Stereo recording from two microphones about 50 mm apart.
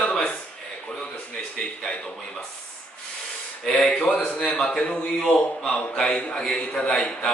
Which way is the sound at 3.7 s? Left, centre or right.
Centre.